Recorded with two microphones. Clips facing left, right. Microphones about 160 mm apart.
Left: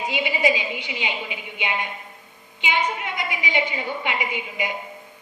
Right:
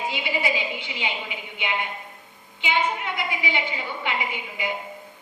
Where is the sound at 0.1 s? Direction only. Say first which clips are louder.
Left 4 dB; 20° left (ahead or behind).